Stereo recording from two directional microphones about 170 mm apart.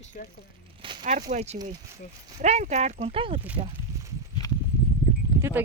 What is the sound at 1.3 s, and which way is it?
Speech, 40° right (ahead or behind).